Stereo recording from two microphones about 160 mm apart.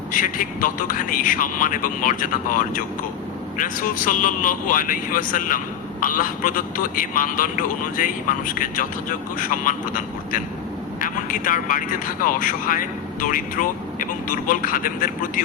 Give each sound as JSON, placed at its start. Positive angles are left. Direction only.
{"t": 0.1, "sound": "a man's voice", "side_deg": 60}